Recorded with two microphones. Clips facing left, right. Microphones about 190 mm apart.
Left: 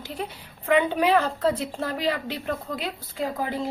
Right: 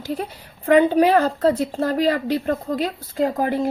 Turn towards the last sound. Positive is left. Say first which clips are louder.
# right 7 dB
turn(degrees=-55)  # may be behind; listen again after turning